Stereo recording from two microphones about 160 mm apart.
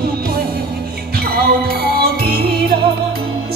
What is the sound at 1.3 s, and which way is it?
Music, 75° right (ahead or behind).